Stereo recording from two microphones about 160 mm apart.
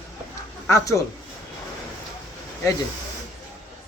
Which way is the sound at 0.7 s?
20° left (ahead or behind).